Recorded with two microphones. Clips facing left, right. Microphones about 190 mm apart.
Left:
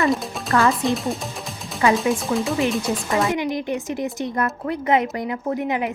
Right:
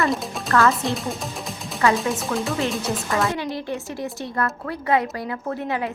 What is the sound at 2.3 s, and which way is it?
A woman's voice, 15° left (ahead or behind).